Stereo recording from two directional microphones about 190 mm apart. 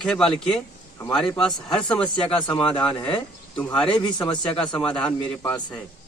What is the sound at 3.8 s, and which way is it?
Speech, 25° left (ahead or behind).